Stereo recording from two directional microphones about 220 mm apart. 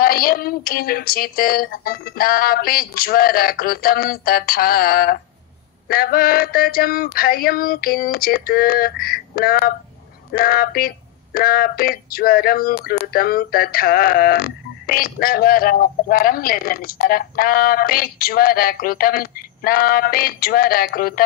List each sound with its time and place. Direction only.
0.0 s speech: 40° left (ahead or behind)